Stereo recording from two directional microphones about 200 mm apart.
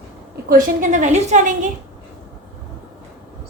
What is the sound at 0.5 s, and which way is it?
A woman's voice, 40° right (ahead or behind).